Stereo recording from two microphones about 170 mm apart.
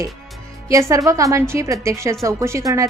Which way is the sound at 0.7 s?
20° right (ahead or behind).